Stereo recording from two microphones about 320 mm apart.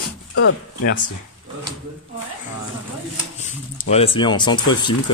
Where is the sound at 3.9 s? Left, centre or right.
Centre.